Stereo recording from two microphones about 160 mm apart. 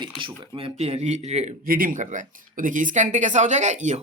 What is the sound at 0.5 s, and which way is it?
Speech, 40° right (ahead or behind).